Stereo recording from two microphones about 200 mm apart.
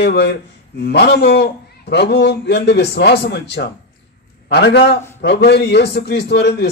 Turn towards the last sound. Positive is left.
turn(degrees=55)  # may be behind; listen again after turning